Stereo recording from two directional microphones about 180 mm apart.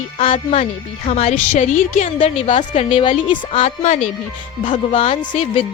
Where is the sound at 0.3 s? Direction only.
35° left (ahead or behind).